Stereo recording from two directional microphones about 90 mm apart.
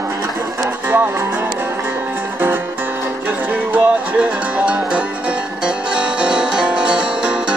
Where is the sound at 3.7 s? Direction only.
15° right (ahead or behind).